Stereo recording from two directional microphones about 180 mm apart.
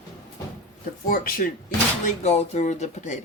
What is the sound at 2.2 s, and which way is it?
Speech, 35° left (ahead or behind).